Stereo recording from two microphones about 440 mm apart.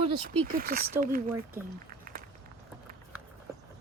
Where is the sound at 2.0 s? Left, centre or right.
Centre.